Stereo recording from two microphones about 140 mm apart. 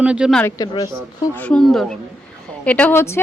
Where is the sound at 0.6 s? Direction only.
25° left (ahead or behind).